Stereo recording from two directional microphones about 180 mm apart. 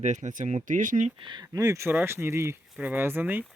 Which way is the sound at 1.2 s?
25° right (ahead or behind).